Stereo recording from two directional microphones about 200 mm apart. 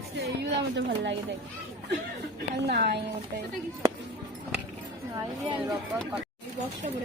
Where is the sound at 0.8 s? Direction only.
60° right (ahead or behind).